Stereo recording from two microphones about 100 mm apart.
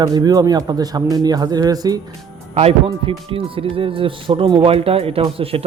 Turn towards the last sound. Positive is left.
turn(degrees=-75)  # may be behind; listen again after turning